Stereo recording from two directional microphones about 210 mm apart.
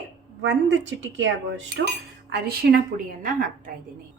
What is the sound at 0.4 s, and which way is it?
A woman's voice, 60° right (ahead or behind).